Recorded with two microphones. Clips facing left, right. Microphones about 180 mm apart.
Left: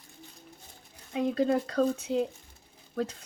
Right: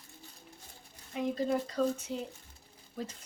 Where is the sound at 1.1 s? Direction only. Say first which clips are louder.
Left 5 dB; 70° left (ahead or behind).